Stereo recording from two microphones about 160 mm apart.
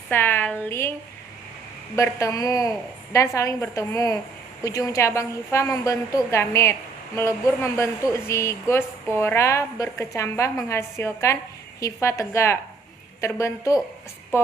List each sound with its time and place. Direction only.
0.1 s a woman's voice: 15° left (ahead or behind)
2.0 s a woman's voice: 20° left (ahead or behind)